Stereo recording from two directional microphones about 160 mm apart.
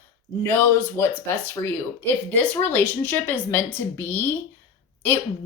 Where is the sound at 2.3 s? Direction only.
10° left (ahead or behind).